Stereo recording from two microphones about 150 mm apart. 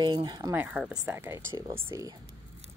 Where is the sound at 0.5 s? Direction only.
10° right (ahead or behind).